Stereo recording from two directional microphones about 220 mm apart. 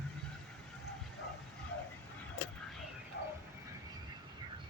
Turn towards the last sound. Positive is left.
turn(degrees=50)  # may be behind; listen again after turning